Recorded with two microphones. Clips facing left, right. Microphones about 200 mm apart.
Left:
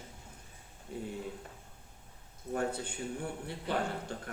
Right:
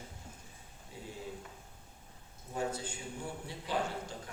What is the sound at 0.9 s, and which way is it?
Speech, 60° left (ahead or behind).